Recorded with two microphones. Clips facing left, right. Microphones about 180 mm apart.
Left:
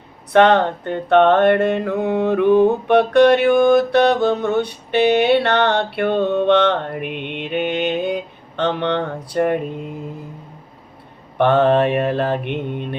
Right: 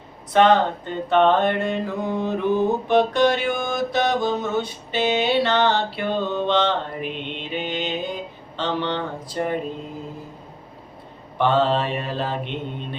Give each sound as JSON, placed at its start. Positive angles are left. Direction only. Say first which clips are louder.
{"t": 0.3, "sound": "mantra", "louder": "left 3 dB", "side_deg": 60}
{"t": 11.3, "sound": "mantra", "louder": "left 5 dB", "side_deg": 60}